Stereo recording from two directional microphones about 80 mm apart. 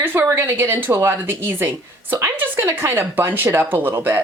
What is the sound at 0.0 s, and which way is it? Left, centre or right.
Speech, right.